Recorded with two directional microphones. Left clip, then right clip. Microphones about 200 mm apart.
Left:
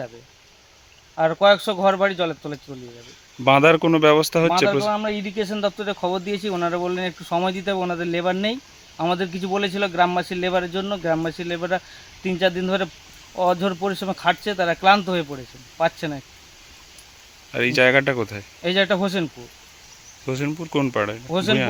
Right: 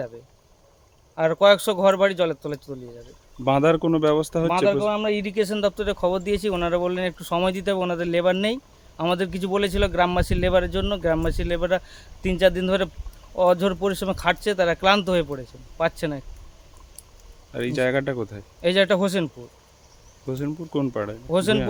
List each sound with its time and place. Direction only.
1.1 s speech: 25° right (ahead or behind)
3.4 s speech: 5° left (ahead or behind)
4.9 s speech: 30° right (ahead or behind)
17.5 s speech: 5° left (ahead or behind)
18.6 s speech: 30° right (ahead or behind)
20.2 s speech: 10° left (ahead or behind)
21.2 s speech: 25° right (ahead or behind)